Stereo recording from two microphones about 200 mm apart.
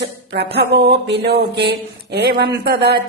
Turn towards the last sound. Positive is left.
turn(degrees=-55)  # may be behind; listen again after turning